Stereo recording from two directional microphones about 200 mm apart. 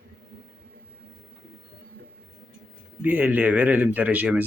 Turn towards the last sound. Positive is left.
turn(degrees=-5)  # may be behind; listen again after turning